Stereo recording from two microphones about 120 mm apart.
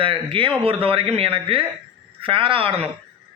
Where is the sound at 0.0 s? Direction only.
45° right (ahead or behind).